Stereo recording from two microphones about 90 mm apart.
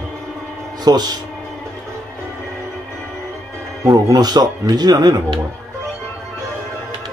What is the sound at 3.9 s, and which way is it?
Speech, 45° right (ahead or behind).